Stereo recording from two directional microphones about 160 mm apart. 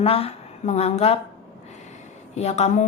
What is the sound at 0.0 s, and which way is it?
A woman's voice, 35° left (ahead or behind).